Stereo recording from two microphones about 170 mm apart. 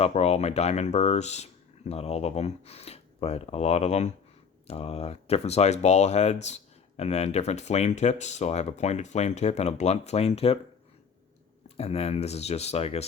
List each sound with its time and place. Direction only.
0.0 s speech: 40° left (ahead or behind)
11.8 s speech: 35° left (ahead or behind)